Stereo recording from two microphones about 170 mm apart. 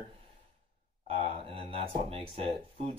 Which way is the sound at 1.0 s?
35° right (ahead or behind).